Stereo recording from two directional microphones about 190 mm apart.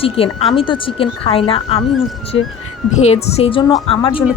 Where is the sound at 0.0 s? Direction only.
30° left (ahead or behind).